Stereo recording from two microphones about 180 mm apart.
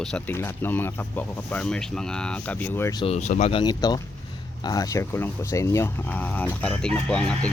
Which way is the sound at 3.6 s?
25° left (ahead or behind).